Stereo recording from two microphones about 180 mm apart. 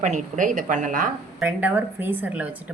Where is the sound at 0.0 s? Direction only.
45° right (ahead or behind).